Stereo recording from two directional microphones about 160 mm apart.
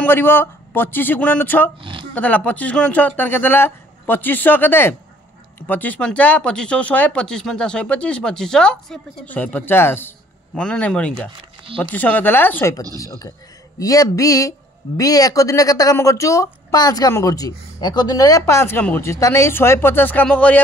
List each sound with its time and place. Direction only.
0.0 s speech: 15° left (ahead or behind)
1.8 s a sound: 30° right (ahead or behind)
2.1 s a woman's voice: 10° left (ahead or behind)